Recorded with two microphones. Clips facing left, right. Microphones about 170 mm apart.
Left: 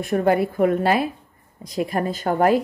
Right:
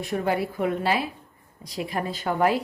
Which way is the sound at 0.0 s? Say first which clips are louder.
Left 6 dB; 55° left (ahead or behind).